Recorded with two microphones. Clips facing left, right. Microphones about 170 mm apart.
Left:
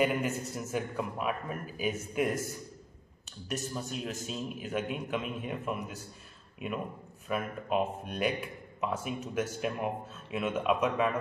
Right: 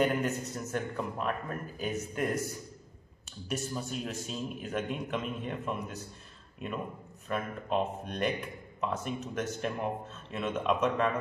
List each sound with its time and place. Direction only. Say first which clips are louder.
0.0 s a man's voice: even; 5° left (ahead or behind)
3.4 s a man's voice: right 1 dB; centre (ahead or behind)